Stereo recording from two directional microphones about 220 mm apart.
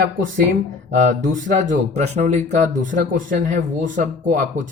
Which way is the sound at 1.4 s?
35° right (ahead or behind).